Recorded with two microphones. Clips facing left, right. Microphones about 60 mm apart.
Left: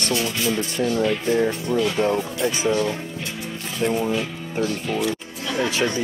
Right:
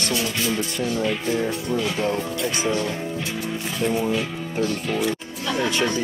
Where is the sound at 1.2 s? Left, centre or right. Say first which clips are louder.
Left 3 dB; left.